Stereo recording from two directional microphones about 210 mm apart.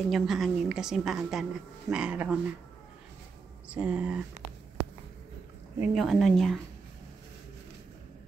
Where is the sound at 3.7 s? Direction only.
5° right (ahead or behind).